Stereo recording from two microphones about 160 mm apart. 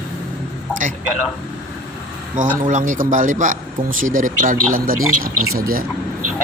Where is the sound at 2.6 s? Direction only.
50° right (ahead or behind).